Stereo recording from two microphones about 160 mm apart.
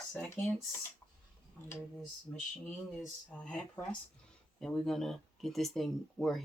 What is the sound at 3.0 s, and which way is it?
Speech, 5° left (ahead or behind).